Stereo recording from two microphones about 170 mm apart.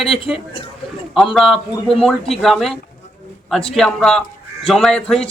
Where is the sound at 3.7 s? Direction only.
Centre (ahead or behind).